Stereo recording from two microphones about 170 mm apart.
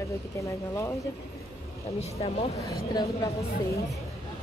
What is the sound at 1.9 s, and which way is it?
Speech, 35° left (ahead or behind).